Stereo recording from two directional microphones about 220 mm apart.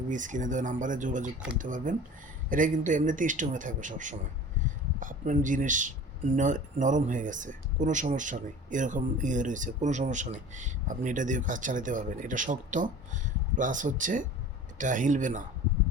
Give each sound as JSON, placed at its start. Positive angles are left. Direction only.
{"t": 0.1, "sound": "speech", "side_deg": -35}